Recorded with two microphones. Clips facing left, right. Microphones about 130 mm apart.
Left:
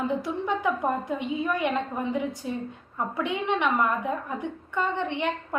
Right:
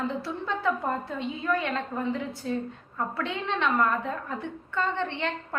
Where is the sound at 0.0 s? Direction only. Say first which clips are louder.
Left 3 dB; 15° left (ahead or behind).